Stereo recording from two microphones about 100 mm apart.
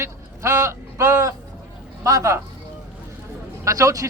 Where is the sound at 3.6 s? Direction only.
35° right (ahead or behind).